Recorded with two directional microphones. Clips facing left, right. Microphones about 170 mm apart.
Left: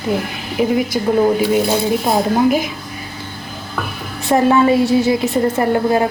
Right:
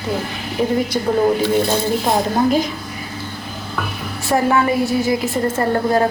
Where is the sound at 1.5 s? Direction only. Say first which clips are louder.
Left 2 dB; 10° left (ahead or behind).